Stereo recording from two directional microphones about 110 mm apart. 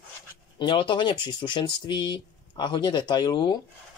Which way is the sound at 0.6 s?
50° left (ahead or behind).